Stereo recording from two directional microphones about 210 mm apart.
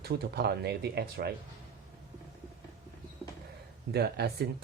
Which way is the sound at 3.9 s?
50° right (ahead or behind).